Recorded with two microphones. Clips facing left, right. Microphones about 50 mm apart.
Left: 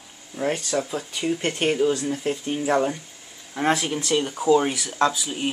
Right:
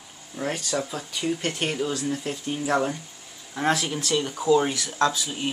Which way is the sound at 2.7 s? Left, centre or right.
Centre.